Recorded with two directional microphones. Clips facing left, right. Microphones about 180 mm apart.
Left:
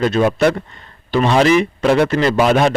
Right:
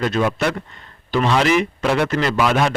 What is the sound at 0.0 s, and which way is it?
Speech, 30° left (ahead or behind).